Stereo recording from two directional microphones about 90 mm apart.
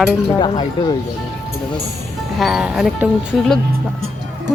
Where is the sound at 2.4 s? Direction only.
5° right (ahead or behind).